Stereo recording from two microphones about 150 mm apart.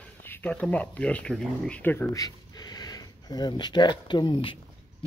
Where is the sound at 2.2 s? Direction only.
25° left (ahead or behind).